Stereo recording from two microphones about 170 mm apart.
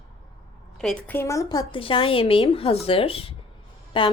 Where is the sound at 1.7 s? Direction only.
30° left (ahead or behind).